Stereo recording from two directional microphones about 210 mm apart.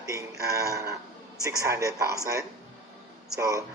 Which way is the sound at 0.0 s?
15° right (ahead or behind).